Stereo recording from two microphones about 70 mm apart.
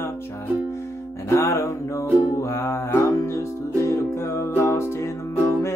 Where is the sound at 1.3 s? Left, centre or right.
Left.